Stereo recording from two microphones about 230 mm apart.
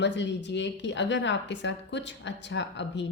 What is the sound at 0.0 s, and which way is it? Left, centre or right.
A woman's voice, left.